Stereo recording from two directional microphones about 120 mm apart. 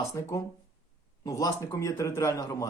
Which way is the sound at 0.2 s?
25° left (ahead or behind).